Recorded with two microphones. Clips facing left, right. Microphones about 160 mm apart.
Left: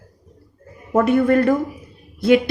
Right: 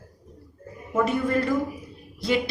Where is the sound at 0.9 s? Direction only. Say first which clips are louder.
Left 8 dB; 60° left (ahead or behind).